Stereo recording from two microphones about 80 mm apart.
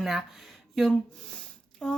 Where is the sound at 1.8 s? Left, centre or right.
Centre.